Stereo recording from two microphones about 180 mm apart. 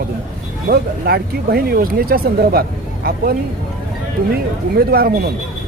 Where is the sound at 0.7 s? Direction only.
60° right (ahead or behind).